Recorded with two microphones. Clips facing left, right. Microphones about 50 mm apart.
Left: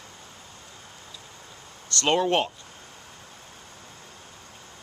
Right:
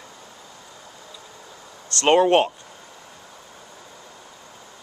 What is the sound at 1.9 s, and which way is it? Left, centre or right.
Speech, right.